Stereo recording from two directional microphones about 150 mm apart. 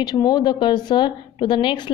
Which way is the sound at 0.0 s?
25° left (ahead or behind).